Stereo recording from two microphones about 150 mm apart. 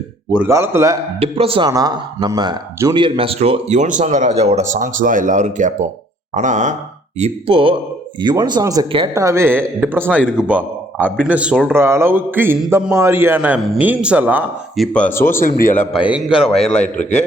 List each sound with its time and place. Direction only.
0.3 s a man's voice: 15° right (ahead or behind)
1.2 s speech: 40° right (ahead or behind)
1.7 s speech: 25° right (ahead or behind); by 5.9 s 55° right (ahead or behind)
6.3 s a sound: 55° right (ahead or behind)
7.2 s a man's voice: 40° right (ahead or behind); by 13.6 s 10° right (ahead or behind)
13.6 s a man's voice: centre (ahead or behind)
14.8 s speech: 10° left (ahead or behind)
15.4 s a man's voice: 70° left (ahead or behind)
16.0 s a man's voice: 5° right (ahead or behind)
16.3 s a man's voice: 40° left (ahead or behind)